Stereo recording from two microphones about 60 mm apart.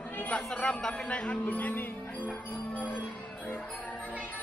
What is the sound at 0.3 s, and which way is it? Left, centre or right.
Speech, centre.